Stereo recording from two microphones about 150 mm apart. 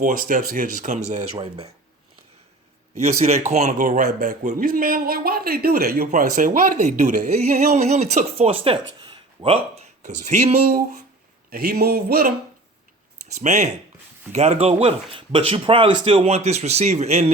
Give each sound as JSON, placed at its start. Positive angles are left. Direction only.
{"t": 0.0, "sound": "speech", "side_deg": -65}
{"t": 3.0, "sound": "a man's voice", "side_deg": -45}
{"t": 6.1, "sound": "speech", "side_deg": -60}
{"t": 10.2, "sound": "speech", "side_deg": -50}
{"t": 11.5, "sound": "a sound", "side_deg": -90}
{"t": 13.3, "sound": "speech", "side_deg": -50}